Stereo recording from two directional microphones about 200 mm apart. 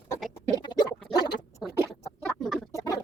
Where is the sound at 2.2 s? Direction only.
Centre (ahead or behind).